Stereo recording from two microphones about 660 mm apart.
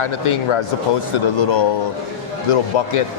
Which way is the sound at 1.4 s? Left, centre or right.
Left.